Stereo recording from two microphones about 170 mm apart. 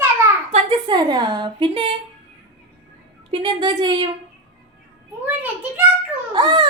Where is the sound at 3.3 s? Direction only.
25° right (ahead or behind).